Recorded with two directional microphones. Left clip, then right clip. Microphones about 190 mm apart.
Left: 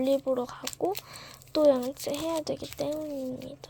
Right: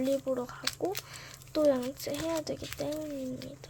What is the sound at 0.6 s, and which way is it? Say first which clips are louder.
Speech: left 3 dB; 10° left (ahead or behind).